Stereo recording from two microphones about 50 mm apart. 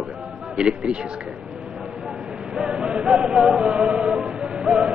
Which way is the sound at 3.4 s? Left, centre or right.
Centre.